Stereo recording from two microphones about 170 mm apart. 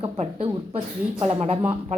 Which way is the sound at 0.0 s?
35° right (ahead or behind).